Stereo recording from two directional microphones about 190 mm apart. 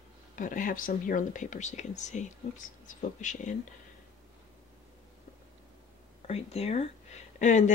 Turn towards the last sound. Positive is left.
turn(degrees=40)  # may be behind; listen again after turning